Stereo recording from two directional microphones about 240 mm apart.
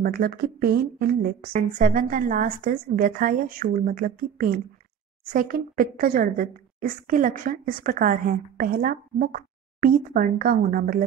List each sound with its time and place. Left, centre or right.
0.0 s speech: right